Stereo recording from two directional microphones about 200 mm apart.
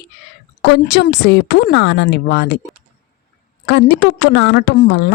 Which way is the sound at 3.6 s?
60° left (ahead or behind).